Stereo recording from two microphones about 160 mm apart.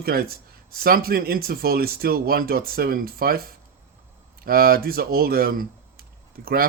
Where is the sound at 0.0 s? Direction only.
70° right (ahead or behind).